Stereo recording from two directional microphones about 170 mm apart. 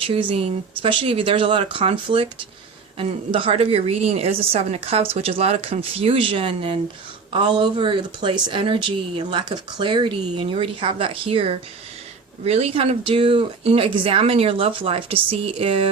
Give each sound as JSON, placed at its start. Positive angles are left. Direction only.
{"t": 0.0, "sound": "speech", "side_deg": -30}